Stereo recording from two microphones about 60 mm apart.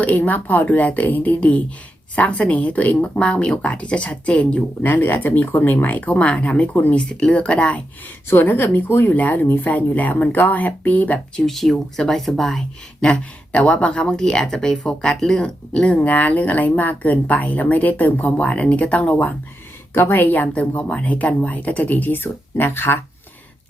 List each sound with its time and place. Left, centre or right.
0.2 s speech: left
4.8 s speech: left
7.1 s speech: centre
8.3 s speech: left
11.4 s speech: centre; by 19.3 s left
19.9 s speech: left